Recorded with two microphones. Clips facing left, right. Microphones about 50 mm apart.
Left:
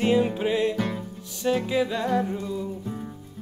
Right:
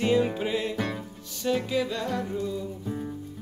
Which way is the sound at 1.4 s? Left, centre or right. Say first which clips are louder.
Left 3 dB; centre.